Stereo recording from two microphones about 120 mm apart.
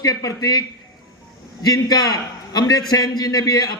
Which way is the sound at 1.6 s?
30° left (ahead or behind).